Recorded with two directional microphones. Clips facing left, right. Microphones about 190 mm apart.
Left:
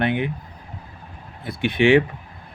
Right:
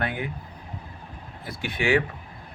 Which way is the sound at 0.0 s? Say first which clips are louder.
Left 7 dB; 20° left (ahead or behind).